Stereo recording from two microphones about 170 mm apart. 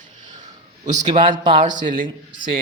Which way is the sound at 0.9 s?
45° right (ahead or behind).